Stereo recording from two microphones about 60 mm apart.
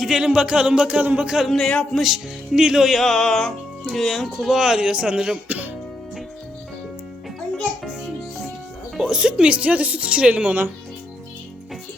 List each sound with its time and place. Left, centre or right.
0.0 s speech: centre
0.3 s speech: centre
1.6 s a man's voice: centre
2.0 s speech: centre
5.5 s speech: right
9.0 s speech: centre